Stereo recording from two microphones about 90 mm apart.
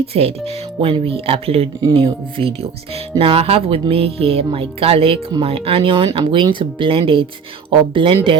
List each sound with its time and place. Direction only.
0.1 s speech: 90° right; by 8.4 s 75° right (ahead or behind)